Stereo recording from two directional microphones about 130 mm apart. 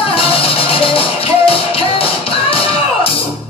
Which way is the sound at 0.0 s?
45° left (ahead or behind).